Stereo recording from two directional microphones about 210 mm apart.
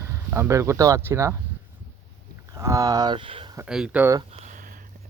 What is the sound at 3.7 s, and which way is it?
Speech, 5° right (ahead or behind).